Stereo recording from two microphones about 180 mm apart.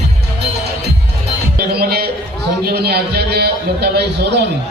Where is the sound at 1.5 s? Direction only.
60° right (ahead or behind).